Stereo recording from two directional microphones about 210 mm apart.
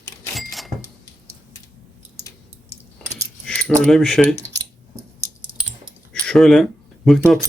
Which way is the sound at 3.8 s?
Centre (ahead or behind).